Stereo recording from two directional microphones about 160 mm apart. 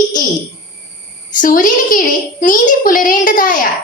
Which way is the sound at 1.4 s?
60° left (ahead or behind).